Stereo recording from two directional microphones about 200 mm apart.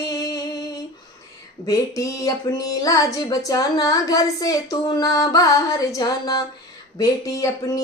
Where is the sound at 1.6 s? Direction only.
15° left (ahead or behind).